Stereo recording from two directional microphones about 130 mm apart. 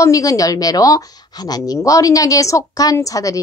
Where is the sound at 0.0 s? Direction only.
25° left (ahead or behind).